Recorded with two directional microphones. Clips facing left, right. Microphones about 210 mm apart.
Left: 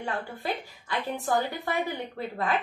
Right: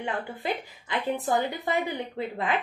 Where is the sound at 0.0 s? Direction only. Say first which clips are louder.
Right 1 dB; 20° right (ahead or behind).